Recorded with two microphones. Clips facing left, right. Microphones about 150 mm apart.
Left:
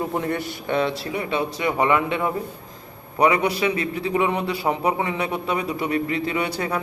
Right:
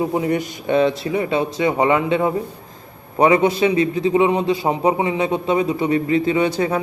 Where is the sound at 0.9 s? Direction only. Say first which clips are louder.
Right 5 dB; 30° right (ahead or behind).